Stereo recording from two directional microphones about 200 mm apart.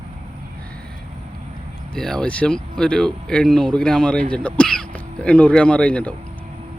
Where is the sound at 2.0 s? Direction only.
5° left (ahead or behind).